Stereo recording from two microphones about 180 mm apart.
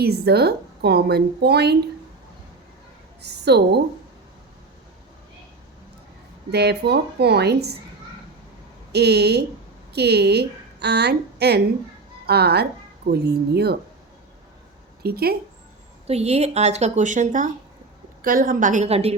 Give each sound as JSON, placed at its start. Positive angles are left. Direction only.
{"t": 0.0, "sound": "a woman's voice", "side_deg": -60}
{"t": 3.2, "sound": "a woman's voice", "side_deg": -70}
{"t": 6.5, "sound": "a woman's voice", "side_deg": -65}
{"t": 8.9, "sound": "a woman's voice", "side_deg": -65}
{"t": 15.0, "sound": "a woman's voice", "side_deg": -60}
{"t": 16.0, "sound": "a woman's voice", "side_deg": -35}